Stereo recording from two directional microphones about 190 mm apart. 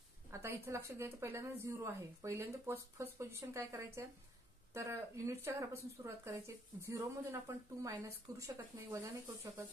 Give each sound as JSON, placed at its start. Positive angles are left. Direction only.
{"t": 0.3, "sound": "speech", "side_deg": -15}